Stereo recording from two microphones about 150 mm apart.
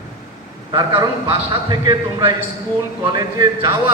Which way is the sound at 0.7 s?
25° right (ahead or behind).